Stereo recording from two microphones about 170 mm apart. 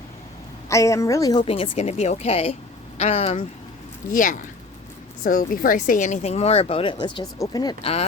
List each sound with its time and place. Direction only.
0.7 s speech: 20° left (ahead or behind); by 3.4 s 40° left (ahead or behind)
4.1 s speech: 50° left (ahead or behind); by 8.0 s 35° left (ahead or behind)